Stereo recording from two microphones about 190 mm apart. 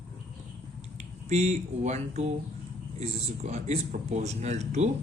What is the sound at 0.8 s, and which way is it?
Speech, 35° right (ahead or behind).